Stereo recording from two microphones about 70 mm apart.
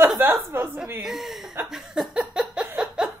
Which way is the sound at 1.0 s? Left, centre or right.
Centre.